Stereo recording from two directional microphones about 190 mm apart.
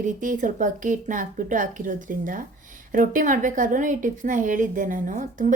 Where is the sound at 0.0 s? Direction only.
45° right (ahead or behind).